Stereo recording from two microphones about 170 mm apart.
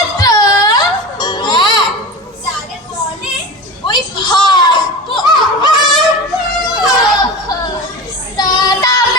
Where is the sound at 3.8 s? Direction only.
25° left (ahead or behind).